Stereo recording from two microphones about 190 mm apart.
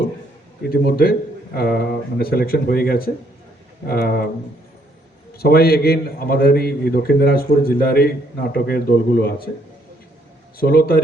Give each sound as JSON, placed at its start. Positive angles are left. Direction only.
{"t": 0.7, "sound": "a man's voice", "side_deg": 55}
{"t": 5.4, "sound": "a man's voice", "side_deg": 55}
{"t": 10.6, "sound": "a man's voice", "side_deg": 55}